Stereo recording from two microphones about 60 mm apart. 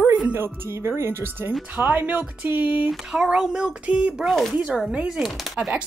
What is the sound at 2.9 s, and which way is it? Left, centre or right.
Speech, centre.